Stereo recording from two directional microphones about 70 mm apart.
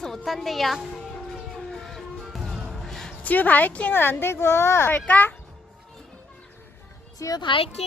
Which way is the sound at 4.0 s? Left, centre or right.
Left.